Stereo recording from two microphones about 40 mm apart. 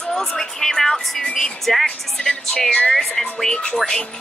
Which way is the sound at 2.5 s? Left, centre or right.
Left.